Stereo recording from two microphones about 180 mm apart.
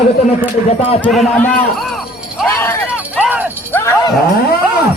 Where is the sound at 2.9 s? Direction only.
10° right (ahead or behind).